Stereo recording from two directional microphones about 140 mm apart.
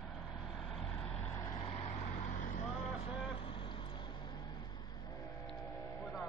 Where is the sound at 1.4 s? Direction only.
35° left (ahead or behind).